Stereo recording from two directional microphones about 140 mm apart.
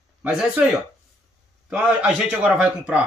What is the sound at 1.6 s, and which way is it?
A man's voice, 5° right (ahead or behind).